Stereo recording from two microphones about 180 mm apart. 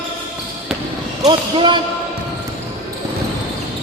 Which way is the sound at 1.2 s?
25° right (ahead or behind).